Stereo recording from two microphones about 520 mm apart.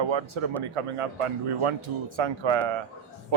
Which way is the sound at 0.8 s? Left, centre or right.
Right.